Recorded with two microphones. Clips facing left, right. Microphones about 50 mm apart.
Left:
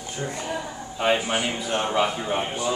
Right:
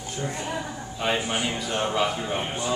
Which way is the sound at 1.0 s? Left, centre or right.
Centre.